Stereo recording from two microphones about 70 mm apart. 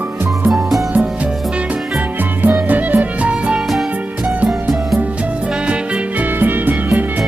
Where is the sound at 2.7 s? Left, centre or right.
Right.